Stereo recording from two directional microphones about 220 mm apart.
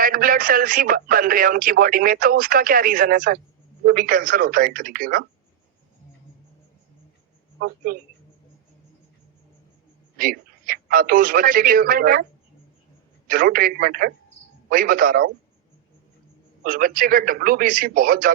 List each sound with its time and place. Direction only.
0.0 s a man's voice: 40° right (ahead or behind)
7.9 s a man's voice: 40° right (ahead or behind)
10.2 s speech: 40° right (ahead or behind)
13.2 s a man's voice: 40° right (ahead or behind)
16.6 s a man's voice: 40° right (ahead or behind)